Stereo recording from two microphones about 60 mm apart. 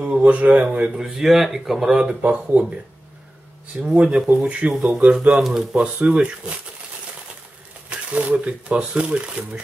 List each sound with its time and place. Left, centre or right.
0.0 s speech: right
0.9 s speech: centre
2.0 s speech: centre
3.8 s speech: centre
4.7 s speech: centre
5.8 s speech: right
7.9 s speech: right